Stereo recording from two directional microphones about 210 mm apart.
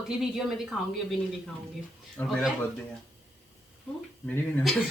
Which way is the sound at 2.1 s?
5° left (ahead or behind).